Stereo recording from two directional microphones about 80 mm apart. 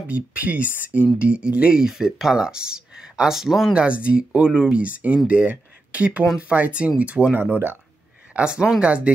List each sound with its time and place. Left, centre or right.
0.1 s speech: centre
3.7 s speech: centre
8.4 s speech: centre